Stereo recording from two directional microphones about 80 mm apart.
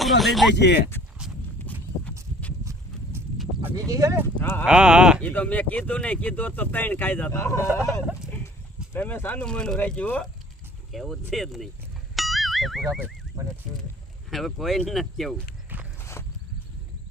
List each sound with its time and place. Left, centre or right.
0.0 s speech: centre
1.2 s horse: centre
2.6 s horse: right
3.8 s speech: right
4.4 s speech: left
4.6 s speech: centre
5.2 s speech: centre
7.3 s speech: left; by 10.2 s centre
10.9 s speech: centre
12.1 s music: centre
14.3 s speech: centre
16.0 s walk: left